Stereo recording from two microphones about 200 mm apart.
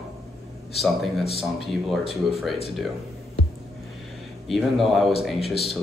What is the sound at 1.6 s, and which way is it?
A man's voice, centre (ahead or behind).